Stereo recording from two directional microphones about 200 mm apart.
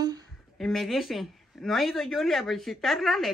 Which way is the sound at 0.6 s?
Centre (ahead or behind).